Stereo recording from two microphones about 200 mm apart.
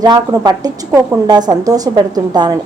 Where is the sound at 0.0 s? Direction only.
20° right (ahead or behind).